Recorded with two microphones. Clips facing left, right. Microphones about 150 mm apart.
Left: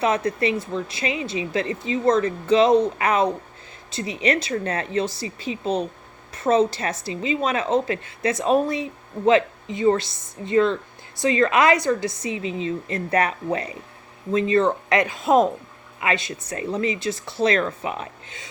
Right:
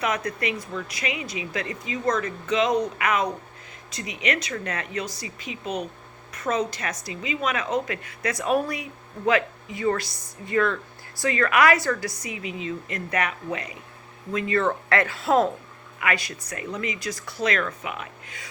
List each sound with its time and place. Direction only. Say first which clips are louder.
0.0 s a woman's voice: left 5 dB; 30° left (ahead or behind)
14.3 s a woman's voice: left 5 dB; 20° left (ahead or behind)